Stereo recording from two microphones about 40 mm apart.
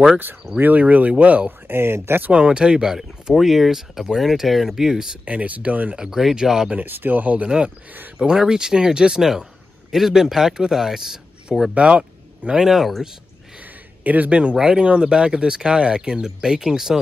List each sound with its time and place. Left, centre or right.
0.6 s speech: right
1.7 s speech: right
2.3 s speech: right
3.3 s speech: centre
5.2 s speech: right
5.9 s speech: centre
6.8 s speech: right
7.4 s speech: right
11.7 s speech: right
12.5 s speech: centre
14.0 s speech: right
14.3 s speech: right
14.6 s speech: centre